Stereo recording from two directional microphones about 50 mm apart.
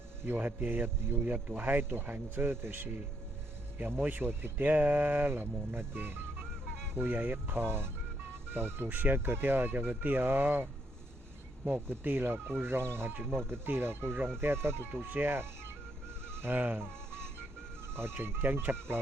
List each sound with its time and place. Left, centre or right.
0.3 s speech: right
2.3 s speech: right
17.9 s speech: right